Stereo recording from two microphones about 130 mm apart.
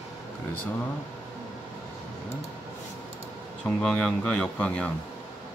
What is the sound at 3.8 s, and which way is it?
Speech, 5° left (ahead or behind).